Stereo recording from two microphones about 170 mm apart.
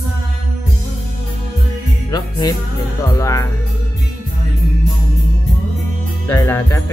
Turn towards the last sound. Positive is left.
turn(degrees=15)  # may be behind; listen again after turning